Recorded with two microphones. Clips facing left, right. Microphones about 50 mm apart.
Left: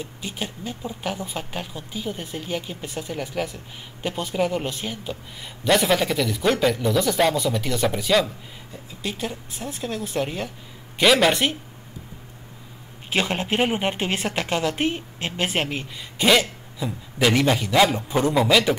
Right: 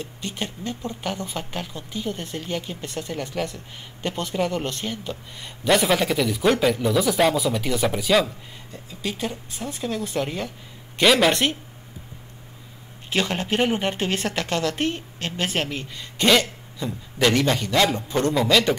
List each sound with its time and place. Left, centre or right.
0.0 s speech: centre
13.1 s a woman's voice: centre
16.2 s a woman's voice: centre